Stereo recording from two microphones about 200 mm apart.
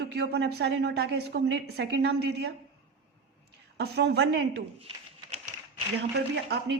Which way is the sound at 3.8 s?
55° right (ahead or behind).